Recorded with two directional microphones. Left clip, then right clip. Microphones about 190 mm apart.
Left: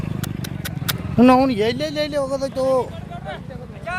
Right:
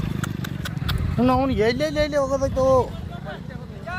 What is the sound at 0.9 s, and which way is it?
Vehicle, 55° left (ahead or behind).